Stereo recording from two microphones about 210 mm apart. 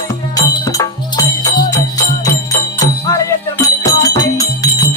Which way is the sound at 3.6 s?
15° left (ahead or behind).